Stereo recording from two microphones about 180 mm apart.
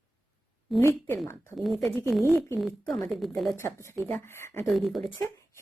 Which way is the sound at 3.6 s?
15° left (ahead or behind).